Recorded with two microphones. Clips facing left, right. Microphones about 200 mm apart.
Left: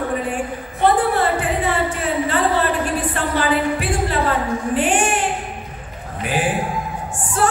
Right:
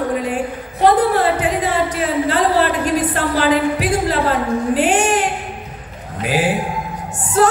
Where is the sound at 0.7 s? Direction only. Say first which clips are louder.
Right 3 dB; 40° right (ahead or behind).